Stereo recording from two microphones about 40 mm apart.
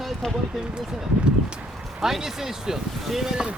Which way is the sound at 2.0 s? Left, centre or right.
Centre.